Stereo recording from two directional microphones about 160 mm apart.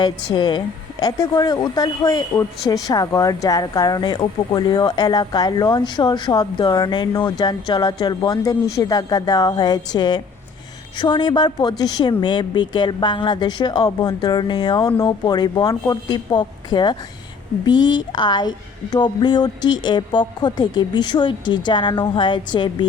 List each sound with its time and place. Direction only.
0.0 s speech: 30° left (ahead or behind)